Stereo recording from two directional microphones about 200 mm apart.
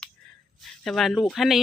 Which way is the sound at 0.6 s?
Centre (ahead or behind).